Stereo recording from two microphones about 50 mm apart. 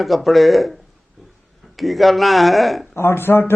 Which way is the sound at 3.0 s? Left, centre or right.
Left.